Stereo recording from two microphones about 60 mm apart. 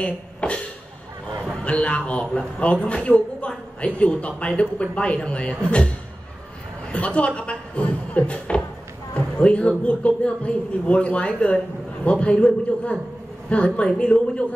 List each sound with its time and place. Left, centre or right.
0.0 s speech: left
1.6 s a man's voice: centre
7.1 s a man's voice: centre